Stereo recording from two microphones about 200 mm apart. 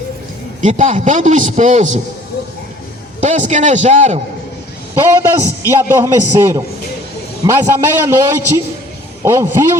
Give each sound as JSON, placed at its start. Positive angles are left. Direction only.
{"t": 0.6, "sound": "a man's voice", "side_deg": -35}
{"t": 3.2, "sound": "a man's voice", "side_deg": -35}
{"t": 5.3, "sound": "a man's voice", "side_deg": -15}